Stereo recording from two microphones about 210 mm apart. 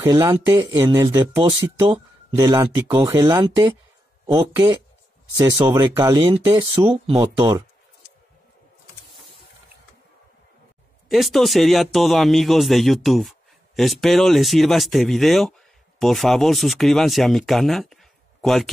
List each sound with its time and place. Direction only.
0.0 s speech: 15° right (ahead or behind)
11.1 s speech: centre (ahead or behind)